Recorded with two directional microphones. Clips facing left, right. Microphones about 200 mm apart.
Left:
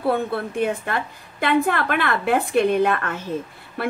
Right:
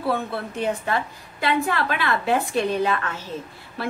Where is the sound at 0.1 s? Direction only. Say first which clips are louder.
Left 4 dB; 55° left (ahead or behind).